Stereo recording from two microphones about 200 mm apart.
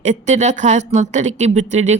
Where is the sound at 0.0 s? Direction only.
35° right (ahead or behind).